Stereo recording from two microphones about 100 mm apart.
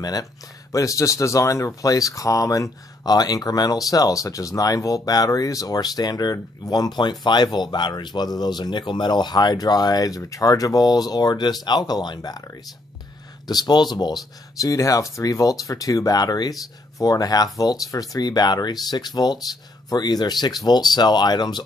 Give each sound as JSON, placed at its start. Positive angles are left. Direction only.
{"t": 0.0, "sound": "speech", "side_deg": 35}
{"t": 13.5, "sound": "speech", "side_deg": 45}